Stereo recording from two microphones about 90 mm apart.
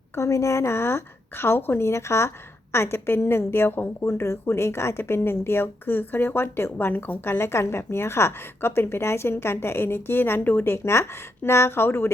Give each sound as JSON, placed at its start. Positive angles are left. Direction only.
{"t": 0.2, "sound": "a woman's voice", "side_deg": 35}